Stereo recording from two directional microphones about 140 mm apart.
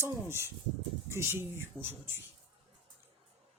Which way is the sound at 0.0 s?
20° right (ahead or behind).